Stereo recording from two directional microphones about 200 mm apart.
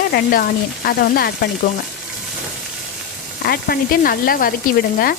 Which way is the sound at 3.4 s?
50° left (ahead or behind).